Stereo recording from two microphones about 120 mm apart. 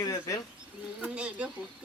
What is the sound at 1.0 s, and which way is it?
Speech, 10° right (ahead or behind).